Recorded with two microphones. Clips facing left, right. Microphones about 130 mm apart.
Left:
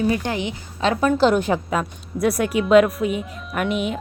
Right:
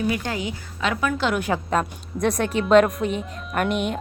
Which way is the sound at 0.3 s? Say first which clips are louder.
Left 3 dB; 25° left (ahead or behind).